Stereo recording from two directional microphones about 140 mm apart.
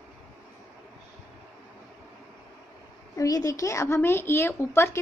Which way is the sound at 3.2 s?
25° left (ahead or behind).